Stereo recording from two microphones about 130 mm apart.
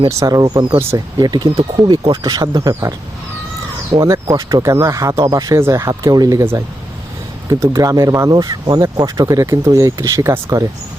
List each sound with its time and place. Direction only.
0.2 s speech: 30° right (ahead or behind)
0.8 s speech: 20° right (ahead or behind)
1.2 s speech: 30° right (ahead or behind)
3.9 s speech: 25° right (ahead or behind)
7.6 s speech: 25° right (ahead or behind)